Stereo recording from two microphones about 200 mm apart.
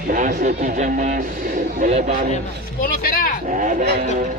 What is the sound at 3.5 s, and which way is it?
Sheep, 40° right (ahead or behind).